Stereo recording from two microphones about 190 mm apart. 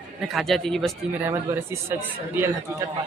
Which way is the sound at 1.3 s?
15° right (ahead or behind).